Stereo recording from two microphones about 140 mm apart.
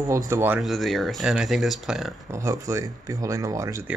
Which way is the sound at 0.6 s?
Centre (ahead or behind).